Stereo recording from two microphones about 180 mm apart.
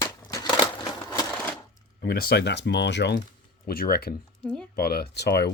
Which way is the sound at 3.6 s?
55° left (ahead or behind).